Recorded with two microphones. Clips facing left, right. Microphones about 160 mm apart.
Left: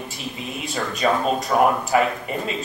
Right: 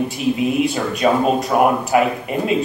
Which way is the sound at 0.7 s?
5° right (ahead or behind).